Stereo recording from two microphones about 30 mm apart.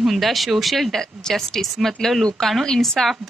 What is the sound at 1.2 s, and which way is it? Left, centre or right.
A woman's voice, left.